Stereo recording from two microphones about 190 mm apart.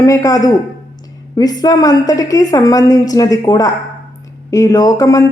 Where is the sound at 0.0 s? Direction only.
20° left (ahead or behind).